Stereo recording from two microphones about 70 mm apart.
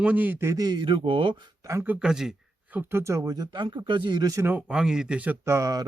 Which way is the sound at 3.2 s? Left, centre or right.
Right.